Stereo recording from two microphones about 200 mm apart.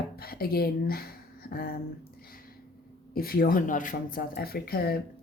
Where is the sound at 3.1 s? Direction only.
50° left (ahead or behind).